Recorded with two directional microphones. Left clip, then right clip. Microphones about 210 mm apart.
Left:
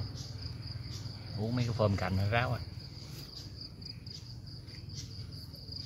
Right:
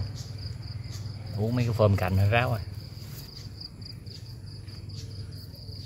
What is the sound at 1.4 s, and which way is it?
Speech, 30° right (ahead or behind).